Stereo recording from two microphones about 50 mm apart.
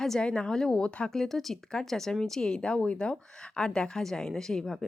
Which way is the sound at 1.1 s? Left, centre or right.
Centre.